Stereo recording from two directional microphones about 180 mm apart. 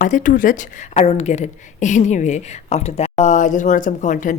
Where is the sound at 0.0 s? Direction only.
45° left (ahead or behind).